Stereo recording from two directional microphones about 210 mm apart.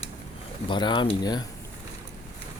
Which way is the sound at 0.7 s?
20° left (ahead or behind).